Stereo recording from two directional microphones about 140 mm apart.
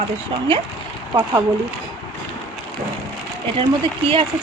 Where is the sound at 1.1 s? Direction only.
25° right (ahead or behind).